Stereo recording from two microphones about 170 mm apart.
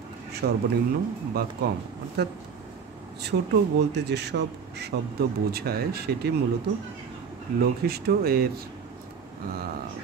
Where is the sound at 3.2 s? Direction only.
80° right.